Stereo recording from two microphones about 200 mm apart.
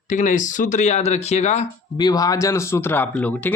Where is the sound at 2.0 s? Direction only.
20° left (ahead or behind).